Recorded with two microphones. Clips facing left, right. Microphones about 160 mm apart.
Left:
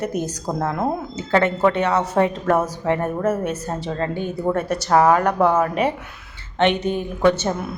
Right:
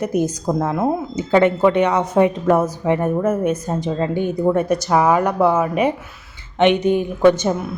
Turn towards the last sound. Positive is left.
turn(degrees=-15)  # may be behind; listen again after turning